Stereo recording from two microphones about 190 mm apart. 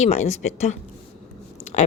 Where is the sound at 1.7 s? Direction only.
35° left (ahead or behind).